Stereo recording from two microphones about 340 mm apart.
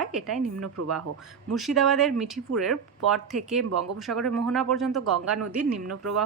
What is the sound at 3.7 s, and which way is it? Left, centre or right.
Speech, right.